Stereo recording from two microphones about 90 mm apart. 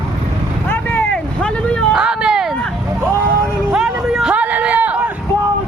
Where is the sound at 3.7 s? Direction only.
5° right (ahead or behind).